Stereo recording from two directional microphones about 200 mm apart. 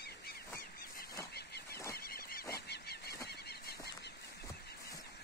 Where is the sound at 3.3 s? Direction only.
55° left (ahead or behind).